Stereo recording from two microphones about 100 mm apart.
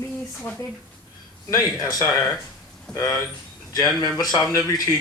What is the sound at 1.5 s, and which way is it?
Speech, 40° left (ahead or behind).